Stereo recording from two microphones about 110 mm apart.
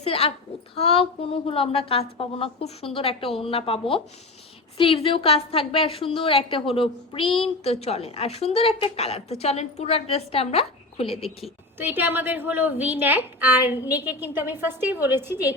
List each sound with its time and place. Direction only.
0.0 s a woman's voice: 65° left (ahead or behind)
11.8 s a woman's voice: 20° right (ahead or behind)